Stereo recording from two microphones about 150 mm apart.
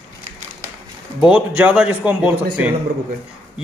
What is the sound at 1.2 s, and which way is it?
A man's voice, 10° right (ahead or behind).